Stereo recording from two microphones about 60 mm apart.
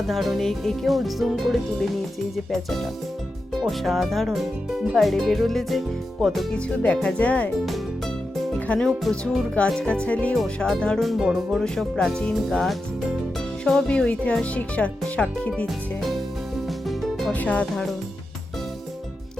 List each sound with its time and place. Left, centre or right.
0.1 s speech: centre
6.7 s speech: centre
7.2 s speech: left
8.5 s music: left
9.1 s speech: centre
9.6 s speech: centre
11.0 s speech: centre
11.6 s speech: centre
13.8 s speech: centre
15.6 s speech: centre
16.9 s music: centre
17.3 s speech: left